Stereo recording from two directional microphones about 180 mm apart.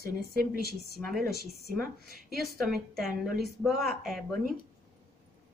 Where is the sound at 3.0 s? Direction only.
Centre (ahead or behind).